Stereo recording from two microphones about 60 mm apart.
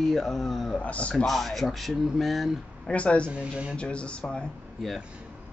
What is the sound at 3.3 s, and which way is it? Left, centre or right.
Speech, centre.